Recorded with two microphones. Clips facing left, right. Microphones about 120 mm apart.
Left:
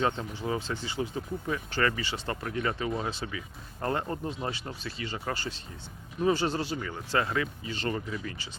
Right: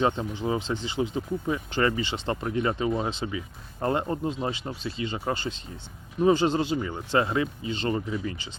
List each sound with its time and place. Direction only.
0.0 s speech: 20° right (ahead or behind)